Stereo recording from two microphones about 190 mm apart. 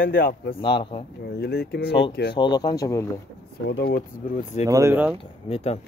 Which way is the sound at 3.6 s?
60° left (ahead or behind).